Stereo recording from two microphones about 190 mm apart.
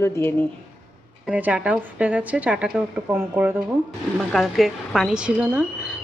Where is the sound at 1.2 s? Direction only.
5° right (ahead or behind).